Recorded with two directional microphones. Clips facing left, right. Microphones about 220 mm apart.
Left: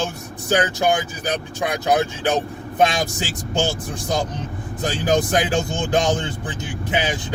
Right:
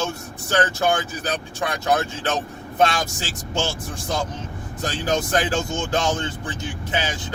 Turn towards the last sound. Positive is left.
turn(degrees=15)  # may be behind; listen again after turning